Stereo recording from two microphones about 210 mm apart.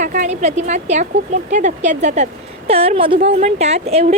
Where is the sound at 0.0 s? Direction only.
35° right (ahead or behind).